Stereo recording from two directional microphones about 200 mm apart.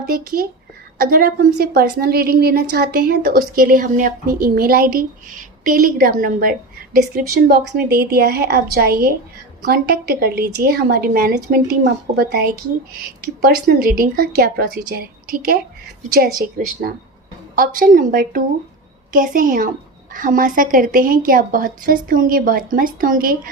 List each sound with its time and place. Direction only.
0.1 s a woman's voice: 45° right (ahead or behind)
13.7 s a woman's voice: 45° right (ahead or behind)
16.1 s a woman's voice: 45° right (ahead or behind)